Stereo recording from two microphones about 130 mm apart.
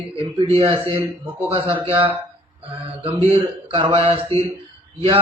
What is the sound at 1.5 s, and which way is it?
Speech, 45° right (ahead or behind).